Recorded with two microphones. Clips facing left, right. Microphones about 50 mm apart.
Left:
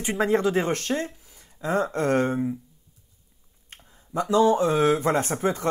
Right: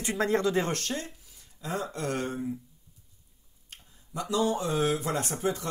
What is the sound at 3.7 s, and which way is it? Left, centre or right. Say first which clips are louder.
Speech: left 8 dB; left.